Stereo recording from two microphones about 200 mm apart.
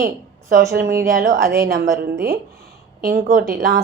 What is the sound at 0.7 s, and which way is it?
A woman's voice, 50° right (ahead or behind).